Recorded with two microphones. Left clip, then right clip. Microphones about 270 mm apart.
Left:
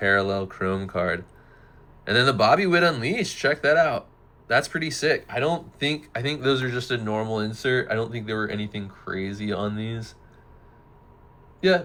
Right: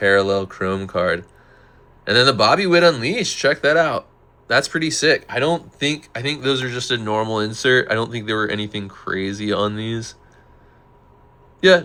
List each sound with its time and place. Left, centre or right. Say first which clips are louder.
0.0 s speech: right 6 dB; centre